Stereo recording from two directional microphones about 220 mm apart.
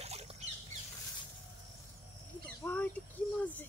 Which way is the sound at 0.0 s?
30° right (ahead or behind).